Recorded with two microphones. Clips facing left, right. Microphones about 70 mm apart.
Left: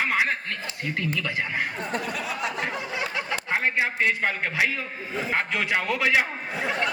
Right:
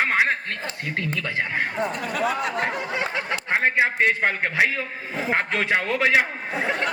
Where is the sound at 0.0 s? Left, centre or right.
Right.